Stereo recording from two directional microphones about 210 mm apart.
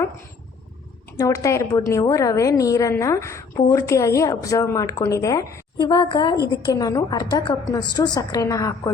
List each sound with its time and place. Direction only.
1.2 s a woman's voice: 15° left (ahead or behind)